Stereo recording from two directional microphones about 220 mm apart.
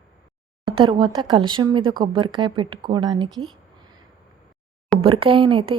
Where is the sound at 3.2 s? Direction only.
Centre (ahead or behind).